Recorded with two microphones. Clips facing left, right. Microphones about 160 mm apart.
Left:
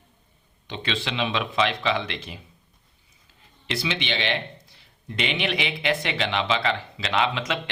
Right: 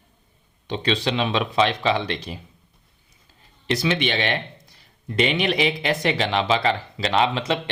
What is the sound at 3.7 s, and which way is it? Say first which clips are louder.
Speech: right 6 dB; 45° right (ahead or behind).